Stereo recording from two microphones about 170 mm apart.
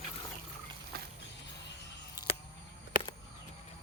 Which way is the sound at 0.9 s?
60° right (ahead or behind).